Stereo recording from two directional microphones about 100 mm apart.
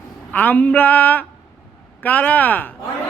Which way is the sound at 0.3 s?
15° left (ahead or behind).